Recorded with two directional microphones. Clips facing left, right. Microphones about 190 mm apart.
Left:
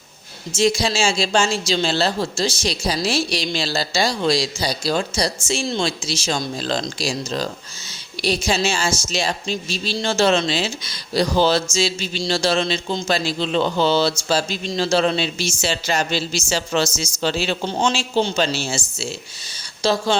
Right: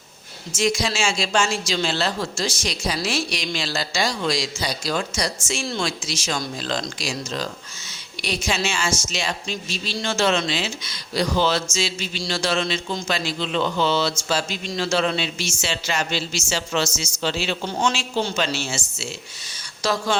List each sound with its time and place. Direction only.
0.5 s a woman's voice: 30° left (ahead or behind)